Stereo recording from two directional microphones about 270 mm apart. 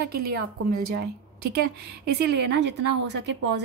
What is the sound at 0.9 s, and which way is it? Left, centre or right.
A woman's voice, right.